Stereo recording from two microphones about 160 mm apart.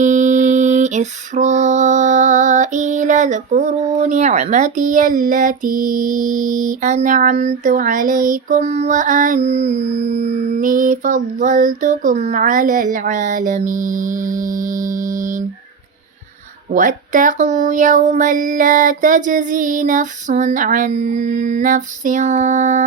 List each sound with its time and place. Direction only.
0.0 s music: 50° right (ahead or behind)
16.7 s music: 55° right (ahead or behind)